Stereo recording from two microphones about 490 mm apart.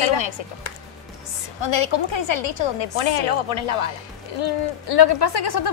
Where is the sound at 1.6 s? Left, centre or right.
Left.